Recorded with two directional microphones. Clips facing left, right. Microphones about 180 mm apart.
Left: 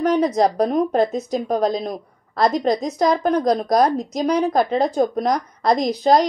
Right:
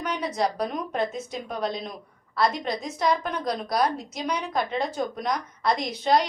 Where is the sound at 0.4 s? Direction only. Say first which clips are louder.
Left 9 dB; 40° left (ahead or behind).